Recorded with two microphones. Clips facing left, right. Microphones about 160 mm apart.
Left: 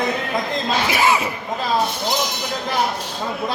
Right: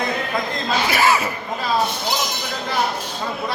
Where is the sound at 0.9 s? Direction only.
20° left (ahead or behind).